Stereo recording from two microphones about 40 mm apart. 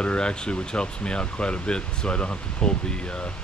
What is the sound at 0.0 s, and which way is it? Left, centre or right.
Speech, left.